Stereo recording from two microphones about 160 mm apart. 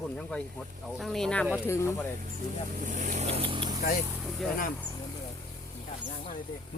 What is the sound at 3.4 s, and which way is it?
Speech, 35° right (ahead or behind).